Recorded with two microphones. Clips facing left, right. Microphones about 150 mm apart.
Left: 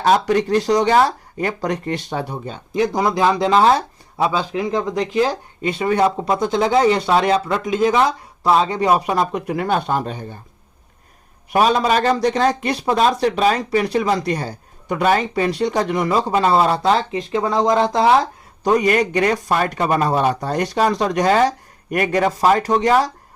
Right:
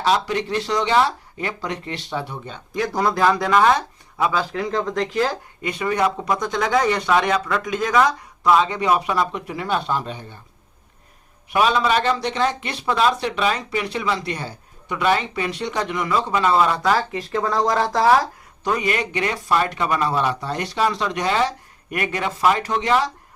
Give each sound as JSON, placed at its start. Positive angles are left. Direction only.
{"t": 0.0, "sound": "speech", "side_deg": 45}
{"t": 2.7, "sound": "speech", "side_deg": 20}
{"t": 5.6, "sound": "a man's voice", "side_deg": 30}
{"t": 11.5, "sound": "a man's voice", "side_deg": 40}
{"t": 18.6, "sound": "a man's voice", "side_deg": 40}